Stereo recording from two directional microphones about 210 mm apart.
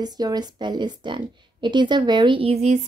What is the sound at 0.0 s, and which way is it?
A woman's voice, 20° right (ahead or behind).